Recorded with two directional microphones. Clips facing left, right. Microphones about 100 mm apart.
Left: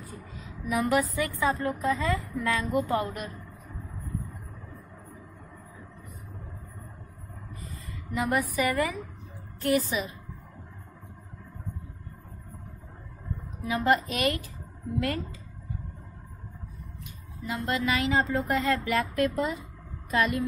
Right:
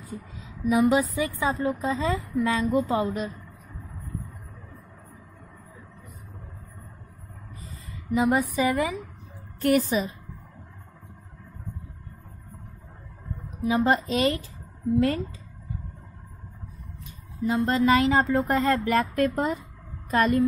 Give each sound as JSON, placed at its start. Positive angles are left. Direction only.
{"t": 0.4, "sound": "a sound", "side_deg": -20}
{"t": 1.1, "sound": "a woman's voice", "side_deg": -20}
{"t": 8.1, "sound": "a woman's voice", "side_deg": -20}
{"t": 9.6, "sound": "a woman's voice", "side_deg": -55}
{"t": 13.7, "sound": "a woman's voice", "side_deg": -25}
{"t": 17.6, "sound": "a woman's voice", "side_deg": -40}